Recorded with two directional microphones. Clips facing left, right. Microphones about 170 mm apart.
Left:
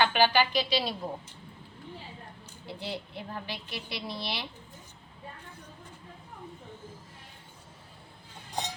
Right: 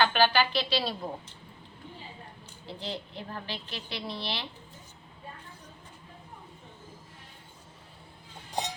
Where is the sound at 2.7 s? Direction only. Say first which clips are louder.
Even; 10° left (ahead or behind).